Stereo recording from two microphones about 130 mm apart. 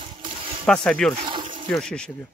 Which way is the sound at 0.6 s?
5° left (ahead or behind).